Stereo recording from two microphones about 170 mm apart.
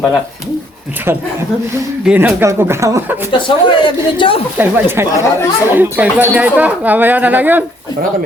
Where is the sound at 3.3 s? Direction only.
30° left (ahead or behind).